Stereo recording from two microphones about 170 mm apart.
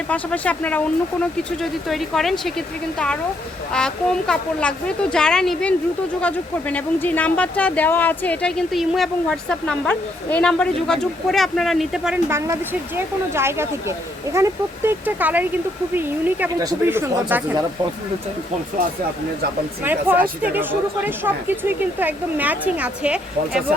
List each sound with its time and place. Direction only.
0.1 s speech: 10° left (ahead or behind)
13.3 s speech: 15° right (ahead or behind)
19.8 s speech: 10° right (ahead or behind)